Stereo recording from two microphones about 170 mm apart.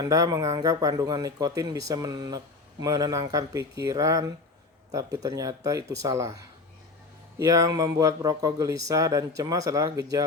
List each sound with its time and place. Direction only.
0.0 s speech: 20° right (ahead or behind)
7.3 s speech: 20° right (ahead or behind)